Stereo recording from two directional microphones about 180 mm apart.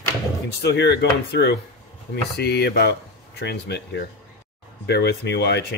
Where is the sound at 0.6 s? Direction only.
70° left (ahead or behind).